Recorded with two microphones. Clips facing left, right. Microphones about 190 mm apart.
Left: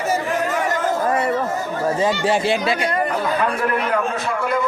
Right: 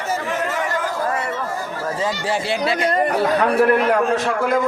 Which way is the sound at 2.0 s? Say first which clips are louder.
Left 3 dB; 20° left (ahead or behind).